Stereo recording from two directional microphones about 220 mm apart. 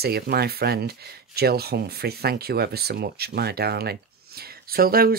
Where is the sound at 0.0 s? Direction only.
45° right (ahead or behind).